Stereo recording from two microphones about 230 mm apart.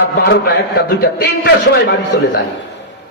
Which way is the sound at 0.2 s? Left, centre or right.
Left.